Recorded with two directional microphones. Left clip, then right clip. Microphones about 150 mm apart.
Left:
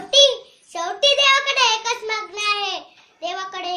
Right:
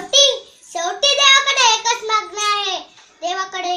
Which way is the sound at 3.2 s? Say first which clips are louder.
Right 5 dB; 55° left (ahead or behind).